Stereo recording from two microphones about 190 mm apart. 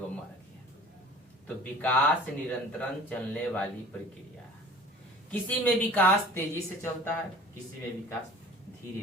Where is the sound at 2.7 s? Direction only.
10° left (ahead or behind).